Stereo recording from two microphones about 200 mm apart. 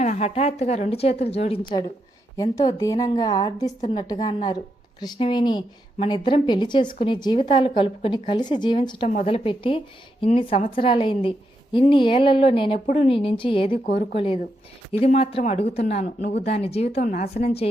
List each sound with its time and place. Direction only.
0.0 s a woman's voice: 35° left (ahead or behind)
2.3 s a woman's voice: 20° left (ahead or behind)
4.0 s a woman's voice: 20° left (ahead or behind)
12.8 s a woman's voice: 35° left (ahead or behind)